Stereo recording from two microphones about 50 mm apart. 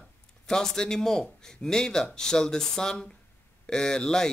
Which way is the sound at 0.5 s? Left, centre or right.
Centre.